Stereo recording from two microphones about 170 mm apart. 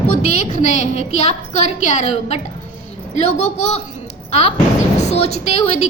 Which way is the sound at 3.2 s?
40° left (ahead or behind).